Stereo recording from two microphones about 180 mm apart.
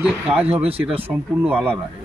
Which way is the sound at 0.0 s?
10° right (ahead or behind).